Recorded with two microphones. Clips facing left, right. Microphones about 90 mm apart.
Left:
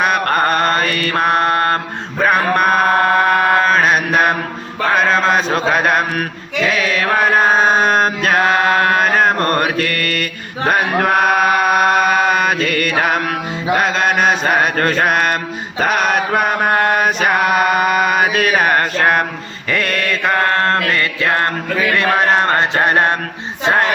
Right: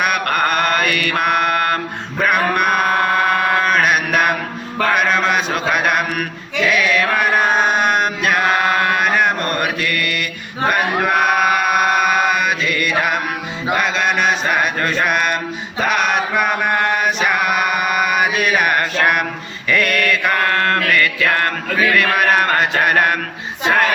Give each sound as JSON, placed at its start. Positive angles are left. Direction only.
{"t": 0.0, "sound": "mantra", "side_deg": 30}
{"t": 4.9, "sound": "chant", "side_deg": 30}
{"t": 13.7, "sound": "mantra", "side_deg": 40}
{"t": 21.9, "sound": "chant", "side_deg": 25}
{"t": 23.6, "sound": "music", "side_deg": 25}